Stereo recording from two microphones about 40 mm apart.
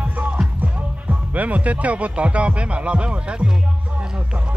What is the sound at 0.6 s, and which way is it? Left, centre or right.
Speech, right.